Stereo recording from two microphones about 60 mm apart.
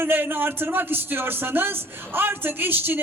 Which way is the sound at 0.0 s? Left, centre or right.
Right.